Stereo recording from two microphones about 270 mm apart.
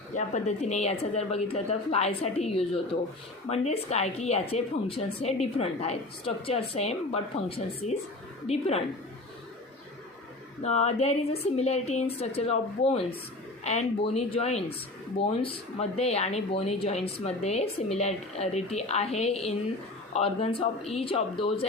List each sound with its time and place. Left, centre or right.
0.1 s speech: left
10.6 s speech: left